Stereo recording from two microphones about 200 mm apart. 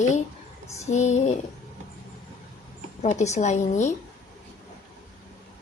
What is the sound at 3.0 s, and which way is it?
Speech, 35° left (ahead or behind).